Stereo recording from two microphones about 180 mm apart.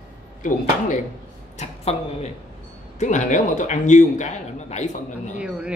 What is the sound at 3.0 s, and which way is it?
Speech, 40° left (ahead or behind).